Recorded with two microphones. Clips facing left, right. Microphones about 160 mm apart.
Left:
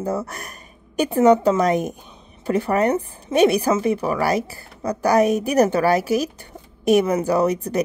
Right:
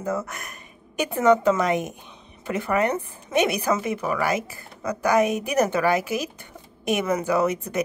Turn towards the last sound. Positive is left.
turn(degrees=35)  # may be behind; listen again after turning